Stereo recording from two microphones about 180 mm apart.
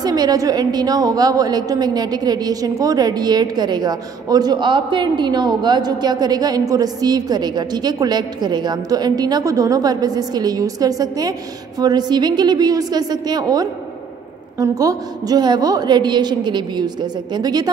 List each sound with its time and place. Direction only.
0.0 s a woman's voice: 20° right (ahead or behind)